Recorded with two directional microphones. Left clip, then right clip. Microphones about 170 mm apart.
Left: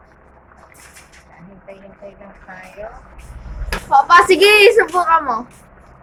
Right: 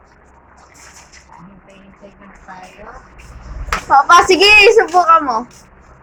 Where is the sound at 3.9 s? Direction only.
15° right (ahead or behind).